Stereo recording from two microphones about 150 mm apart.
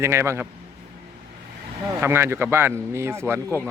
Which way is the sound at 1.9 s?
15° right (ahead or behind).